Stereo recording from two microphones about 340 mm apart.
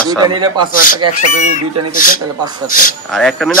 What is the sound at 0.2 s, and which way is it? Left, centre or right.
Speech, centre.